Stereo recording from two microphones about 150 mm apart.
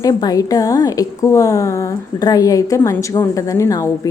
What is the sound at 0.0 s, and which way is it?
A woman's voice, 25° left (ahead or behind).